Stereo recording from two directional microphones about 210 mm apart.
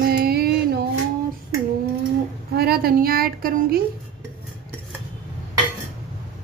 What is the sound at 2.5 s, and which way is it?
A woman's voice, 50° right (ahead or behind).